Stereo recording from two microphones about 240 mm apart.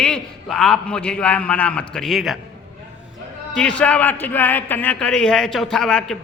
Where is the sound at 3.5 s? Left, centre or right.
Centre.